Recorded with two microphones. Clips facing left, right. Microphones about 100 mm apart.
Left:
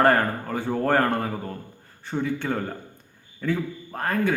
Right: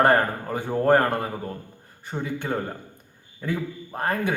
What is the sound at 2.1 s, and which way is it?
Speech, 15° right (ahead or behind).